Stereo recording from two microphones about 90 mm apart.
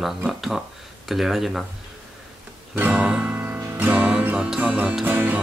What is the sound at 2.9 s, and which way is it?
Music, 10° right (ahead or behind).